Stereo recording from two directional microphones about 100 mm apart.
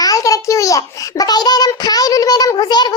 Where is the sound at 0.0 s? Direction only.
35° left (ahead or behind).